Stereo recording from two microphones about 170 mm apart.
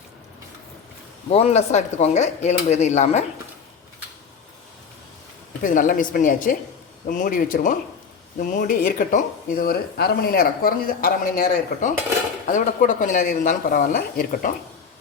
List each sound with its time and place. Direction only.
1.3 s speech: 35° left (ahead or behind)
5.6 s speech: 50° left (ahead or behind)